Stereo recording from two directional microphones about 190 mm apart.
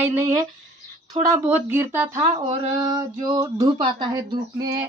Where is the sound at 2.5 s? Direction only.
25° right (ahead or behind).